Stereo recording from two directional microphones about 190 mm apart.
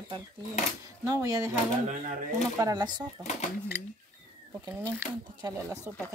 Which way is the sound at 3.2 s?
35° left (ahead or behind).